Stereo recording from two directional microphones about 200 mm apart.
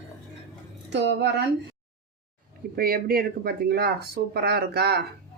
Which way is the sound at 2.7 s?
45° right (ahead or behind).